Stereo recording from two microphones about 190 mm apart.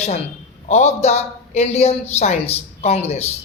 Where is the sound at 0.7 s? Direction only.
35° left (ahead or behind).